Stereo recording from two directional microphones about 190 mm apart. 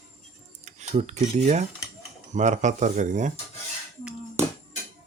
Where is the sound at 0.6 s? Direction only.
35° right (ahead or behind).